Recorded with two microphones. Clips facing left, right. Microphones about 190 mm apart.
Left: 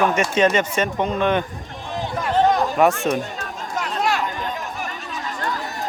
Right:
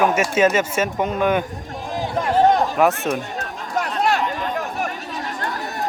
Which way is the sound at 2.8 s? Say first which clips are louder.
Left 1 dB; centre (ahead or behind).